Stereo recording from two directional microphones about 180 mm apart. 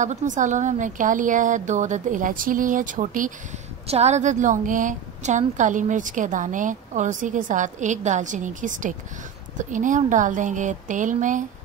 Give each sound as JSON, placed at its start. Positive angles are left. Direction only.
{"t": 0.0, "sound": "a woman's voice", "side_deg": -40}